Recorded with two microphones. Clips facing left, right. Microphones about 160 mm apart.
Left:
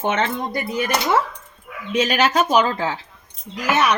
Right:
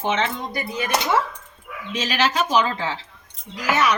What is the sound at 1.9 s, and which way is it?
Speech, 55° left (ahead or behind).